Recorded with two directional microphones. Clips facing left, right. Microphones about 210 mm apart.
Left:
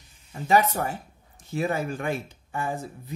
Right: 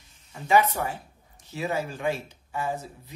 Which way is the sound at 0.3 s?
40° left (ahead or behind).